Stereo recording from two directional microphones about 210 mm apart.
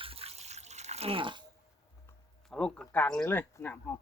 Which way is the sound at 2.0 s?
5° left (ahead or behind).